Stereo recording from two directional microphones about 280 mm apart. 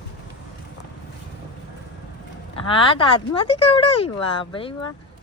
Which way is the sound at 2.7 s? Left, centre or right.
Centre.